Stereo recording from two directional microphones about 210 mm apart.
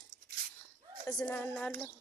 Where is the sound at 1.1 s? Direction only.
15° left (ahead or behind).